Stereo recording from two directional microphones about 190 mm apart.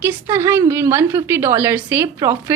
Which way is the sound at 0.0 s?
10° right (ahead or behind).